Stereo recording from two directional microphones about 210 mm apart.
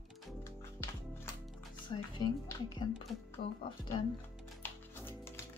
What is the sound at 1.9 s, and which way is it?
Speech, 20° left (ahead or behind).